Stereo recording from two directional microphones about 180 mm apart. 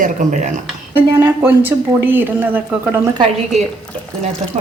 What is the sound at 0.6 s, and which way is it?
A woman's voice, 10° right (ahead or behind).